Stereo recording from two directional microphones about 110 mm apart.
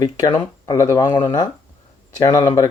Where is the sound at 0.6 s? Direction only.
30° left (ahead or behind).